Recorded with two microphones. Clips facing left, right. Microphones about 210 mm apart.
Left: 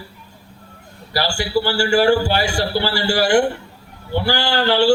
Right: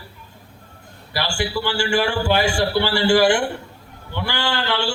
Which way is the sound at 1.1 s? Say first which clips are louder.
Left 4 dB; 40° left (ahead or behind).